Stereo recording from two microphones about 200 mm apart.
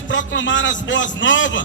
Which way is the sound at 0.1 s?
65° left (ahead or behind).